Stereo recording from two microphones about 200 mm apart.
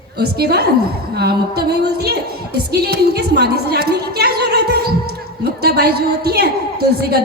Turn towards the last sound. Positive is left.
turn(degrees=-50)  # may be behind; listen again after turning